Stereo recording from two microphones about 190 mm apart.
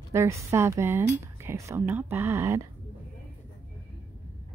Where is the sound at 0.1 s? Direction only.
15° right (ahead or behind).